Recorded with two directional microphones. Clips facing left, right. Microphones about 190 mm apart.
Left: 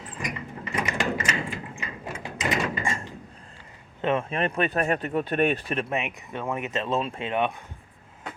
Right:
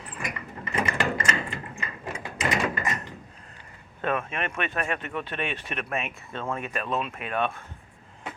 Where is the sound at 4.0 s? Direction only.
25° left (ahead or behind).